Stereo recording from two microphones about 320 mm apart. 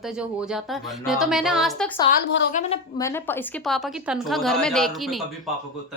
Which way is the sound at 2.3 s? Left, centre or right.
Left.